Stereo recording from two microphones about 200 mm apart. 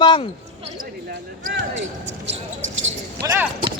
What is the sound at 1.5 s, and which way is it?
Speech, 65° right (ahead or behind).